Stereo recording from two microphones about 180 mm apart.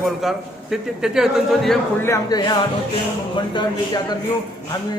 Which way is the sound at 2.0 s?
20° left (ahead or behind).